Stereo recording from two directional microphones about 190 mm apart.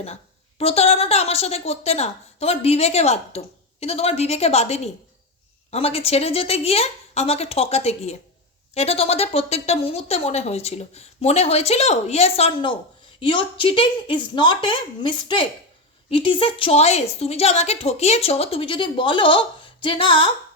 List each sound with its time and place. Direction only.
0.6 s a woman's voice: 30° left (ahead or behind)